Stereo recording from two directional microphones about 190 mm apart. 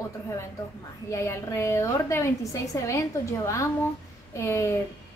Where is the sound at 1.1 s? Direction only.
15° left (ahead or behind).